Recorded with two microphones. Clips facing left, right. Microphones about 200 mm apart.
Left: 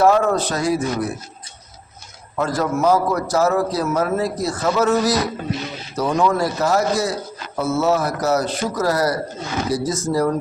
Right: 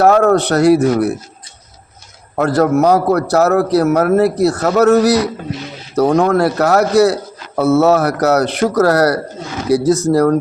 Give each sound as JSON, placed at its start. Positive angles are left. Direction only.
{"t": 0.0, "sound": "speech", "side_deg": -65}
{"t": 2.3, "sound": "speech", "side_deg": -65}